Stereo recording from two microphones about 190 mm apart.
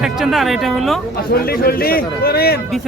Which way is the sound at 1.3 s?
50° left (ahead or behind).